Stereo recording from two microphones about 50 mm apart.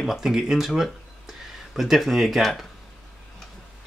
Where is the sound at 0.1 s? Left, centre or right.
Centre.